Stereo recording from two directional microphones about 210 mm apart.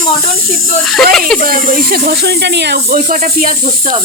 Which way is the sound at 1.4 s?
40° right (ahead or behind).